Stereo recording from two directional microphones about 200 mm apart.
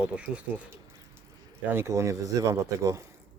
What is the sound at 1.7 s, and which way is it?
Speech, 15° right (ahead or behind).